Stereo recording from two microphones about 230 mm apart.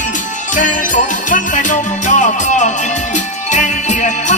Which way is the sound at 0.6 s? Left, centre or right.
Left.